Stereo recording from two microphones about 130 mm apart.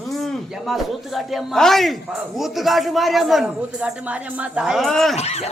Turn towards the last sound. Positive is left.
turn(degrees=55)  # may be behind; listen again after turning